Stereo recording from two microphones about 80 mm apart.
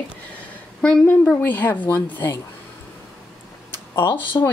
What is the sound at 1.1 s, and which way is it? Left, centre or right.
Speech, left.